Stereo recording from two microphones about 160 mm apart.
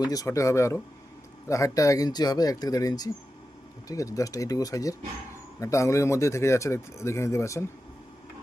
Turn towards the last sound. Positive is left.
turn(degrees=20)  # may be behind; listen again after turning